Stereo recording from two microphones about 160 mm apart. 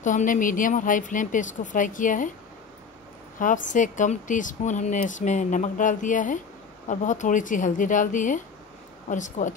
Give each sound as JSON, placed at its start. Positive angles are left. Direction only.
{"t": 0.0, "sound": "a woman's voice", "side_deg": 55}
{"t": 3.3, "sound": "speech", "side_deg": 55}